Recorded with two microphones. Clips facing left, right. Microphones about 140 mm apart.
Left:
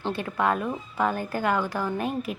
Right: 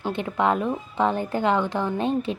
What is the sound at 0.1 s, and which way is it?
A woman's voice, 20° right (ahead or behind).